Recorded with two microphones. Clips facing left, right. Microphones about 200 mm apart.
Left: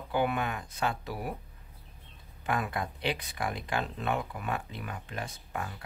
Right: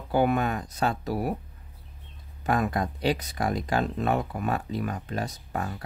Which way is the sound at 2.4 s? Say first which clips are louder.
Right 6 dB; 40° right (ahead or behind).